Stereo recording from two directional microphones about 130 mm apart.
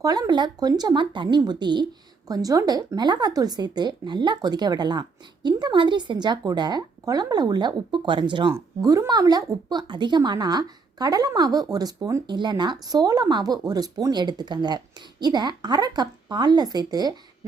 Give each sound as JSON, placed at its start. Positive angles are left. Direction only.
{"t": 0.0, "sound": "speech", "side_deg": -30}
{"t": 8.5, "sound": "speech", "side_deg": -25}